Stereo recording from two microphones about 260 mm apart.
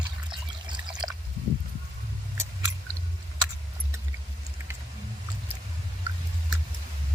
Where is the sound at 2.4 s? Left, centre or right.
Centre.